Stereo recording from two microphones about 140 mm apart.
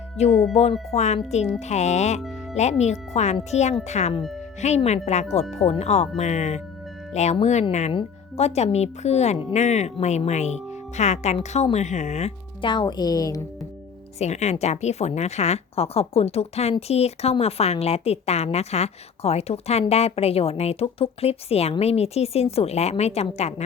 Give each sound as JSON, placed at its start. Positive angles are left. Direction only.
{"t": 0.2, "sound": "a woman's voice", "side_deg": 50}
{"t": 12.6, "sound": "speech", "side_deg": 35}
{"t": 14.2, "sound": "a woman's voice", "side_deg": 55}